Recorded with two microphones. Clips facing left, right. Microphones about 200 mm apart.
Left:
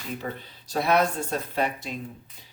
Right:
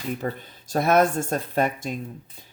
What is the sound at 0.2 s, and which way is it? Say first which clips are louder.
Speech: right 5 dB; 45° right (ahead or behind).